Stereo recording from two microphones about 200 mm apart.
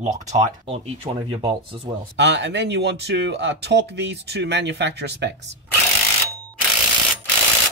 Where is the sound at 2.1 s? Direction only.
60° right (ahead or behind).